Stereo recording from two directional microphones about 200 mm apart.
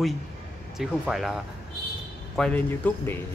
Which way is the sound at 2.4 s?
5° left (ahead or behind).